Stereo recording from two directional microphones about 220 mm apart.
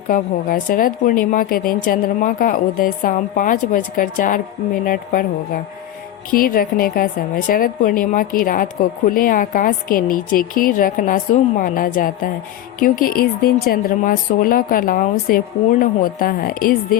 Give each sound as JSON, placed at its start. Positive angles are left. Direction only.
{"t": 0.1, "sound": "a woman's voice", "side_deg": 40}
{"t": 6.3, "sound": "a woman's voice", "side_deg": 40}